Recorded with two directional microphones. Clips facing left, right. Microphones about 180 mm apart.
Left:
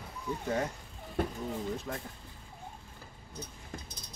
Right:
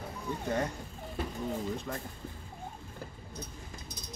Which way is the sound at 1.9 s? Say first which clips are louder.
Right 1 dB; 5° left (ahead or behind).